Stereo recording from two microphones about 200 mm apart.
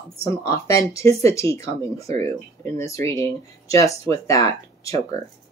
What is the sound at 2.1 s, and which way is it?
Speech, 30° right (ahead or behind).